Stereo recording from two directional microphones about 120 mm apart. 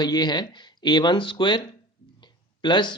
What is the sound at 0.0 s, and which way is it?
Speech, 35° left (ahead or behind).